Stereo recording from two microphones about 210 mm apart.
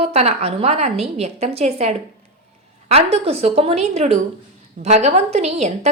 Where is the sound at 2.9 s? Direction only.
30° right (ahead or behind).